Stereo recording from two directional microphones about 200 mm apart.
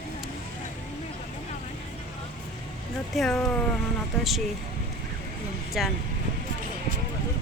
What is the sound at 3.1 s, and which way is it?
Speech, centre (ahead or behind).